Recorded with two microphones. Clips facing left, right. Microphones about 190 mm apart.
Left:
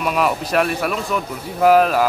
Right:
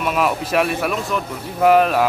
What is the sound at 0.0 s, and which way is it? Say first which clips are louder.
Speech: even; centre (ahead or behind).